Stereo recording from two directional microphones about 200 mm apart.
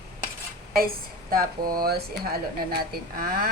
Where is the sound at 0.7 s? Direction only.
45° right (ahead or behind).